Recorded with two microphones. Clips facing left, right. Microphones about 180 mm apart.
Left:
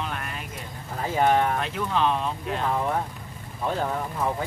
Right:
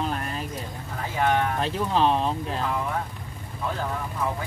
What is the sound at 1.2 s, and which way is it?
Speech, 30° left (ahead or behind).